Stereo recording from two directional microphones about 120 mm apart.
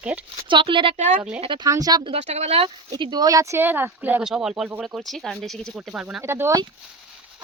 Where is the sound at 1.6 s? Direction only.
30° right (ahead or behind).